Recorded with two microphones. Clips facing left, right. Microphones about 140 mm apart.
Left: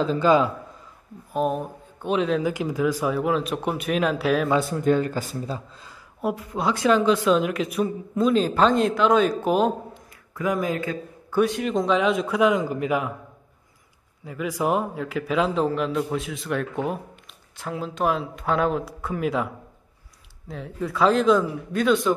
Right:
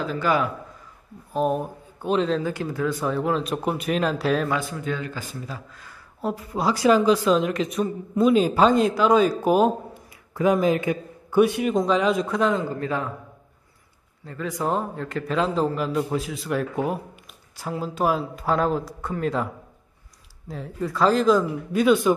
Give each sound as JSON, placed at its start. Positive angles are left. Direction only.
{"t": 0.0, "sound": "a man's voice", "side_deg": 25}
{"t": 1.3, "sound": "a man's voice", "side_deg": 0}
{"t": 4.6, "sound": "a man's voice", "side_deg": 45}
{"t": 5.5, "sound": "speech", "side_deg": 25}
{"t": 6.2, "sound": "a man's voice", "side_deg": 0}
{"t": 8.2, "sound": "a man's voice", "side_deg": -5}
{"t": 10.3, "sound": "a man's voice", "side_deg": -25}
{"t": 14.2, "sound": "a man's voice", "side_deg": 10}